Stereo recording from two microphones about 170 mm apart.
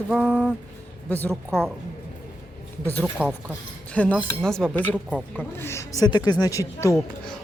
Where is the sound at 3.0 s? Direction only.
5° right (ahead or behind).